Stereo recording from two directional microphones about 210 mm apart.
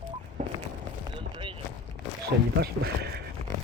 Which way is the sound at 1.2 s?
25° right (ahead or behind).